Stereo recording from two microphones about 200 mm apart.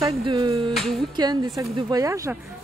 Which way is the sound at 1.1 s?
20° right (ahead or behind).